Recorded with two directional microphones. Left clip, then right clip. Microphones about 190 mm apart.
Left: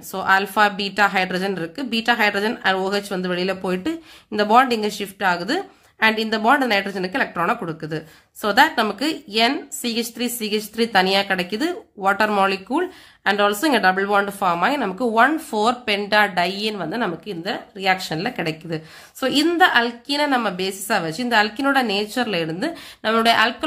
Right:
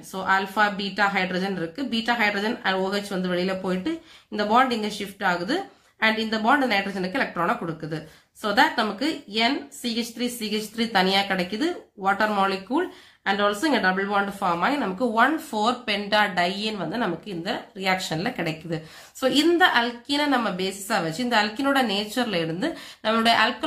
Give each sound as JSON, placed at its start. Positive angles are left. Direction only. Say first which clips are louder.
{"t": 0.1, "sound": "a woman's voice", "louder": "left 5 dB", "side_deg": 40}